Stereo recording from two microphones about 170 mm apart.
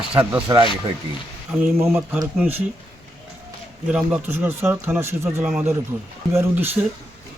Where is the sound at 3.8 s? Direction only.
5° right (ahead or behind).